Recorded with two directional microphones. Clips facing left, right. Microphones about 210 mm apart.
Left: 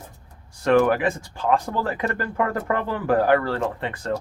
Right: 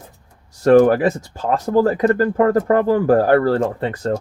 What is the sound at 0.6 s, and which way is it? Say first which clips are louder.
Speech: right 7 dB; 35° right (ahead or behind).